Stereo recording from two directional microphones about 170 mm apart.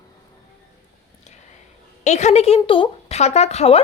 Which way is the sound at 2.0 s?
40° left (ahead or behind).